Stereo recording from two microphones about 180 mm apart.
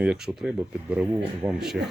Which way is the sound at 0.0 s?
5° right (ahead or behind).